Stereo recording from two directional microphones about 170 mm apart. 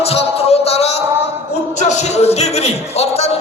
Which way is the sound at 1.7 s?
40° left (ahead or behind).